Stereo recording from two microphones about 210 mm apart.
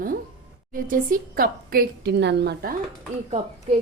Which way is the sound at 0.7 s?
40° right (ahead or behind).